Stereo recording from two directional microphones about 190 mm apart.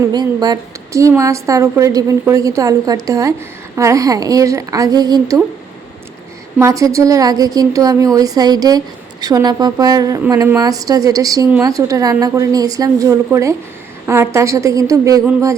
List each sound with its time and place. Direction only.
0.0 s a woman's voice: 20° right (ahead or behind)
6.6 s a woman's voice: 15° right (ahead or behind)